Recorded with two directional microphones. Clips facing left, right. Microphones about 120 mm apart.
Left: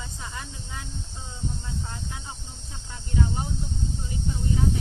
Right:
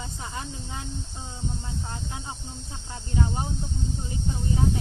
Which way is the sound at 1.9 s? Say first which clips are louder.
Right 2 dB; 25° right (ahead or behind).